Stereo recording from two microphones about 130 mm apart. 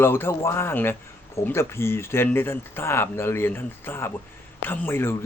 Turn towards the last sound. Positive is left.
turn(degrees=20)  # may be behind; listen again after turning